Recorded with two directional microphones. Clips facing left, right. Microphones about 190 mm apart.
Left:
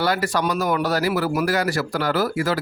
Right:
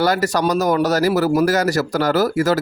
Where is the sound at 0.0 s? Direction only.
40° right (ahead or behind).